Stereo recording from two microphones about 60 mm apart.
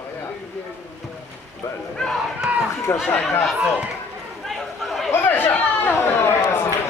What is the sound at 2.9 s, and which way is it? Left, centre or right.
Speech, left.